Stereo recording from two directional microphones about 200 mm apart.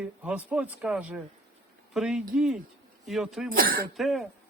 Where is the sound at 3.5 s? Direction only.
45° right (ahead or behind).